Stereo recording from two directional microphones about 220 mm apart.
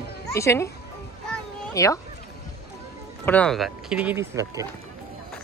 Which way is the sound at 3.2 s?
5° left (ahead or behind).